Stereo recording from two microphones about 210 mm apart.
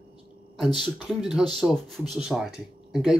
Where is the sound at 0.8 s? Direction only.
Centre (ahead or behind).